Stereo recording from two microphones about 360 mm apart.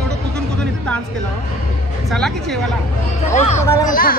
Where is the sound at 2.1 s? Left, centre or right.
Centre.